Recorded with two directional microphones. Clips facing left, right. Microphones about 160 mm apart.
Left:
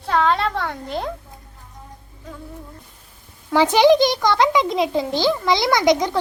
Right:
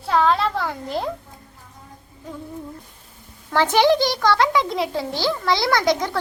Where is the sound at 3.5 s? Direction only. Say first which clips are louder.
Left 3 dB; 15° left (ahead or behind).